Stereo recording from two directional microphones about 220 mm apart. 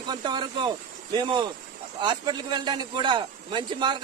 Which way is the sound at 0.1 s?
20° right (ahead or behind).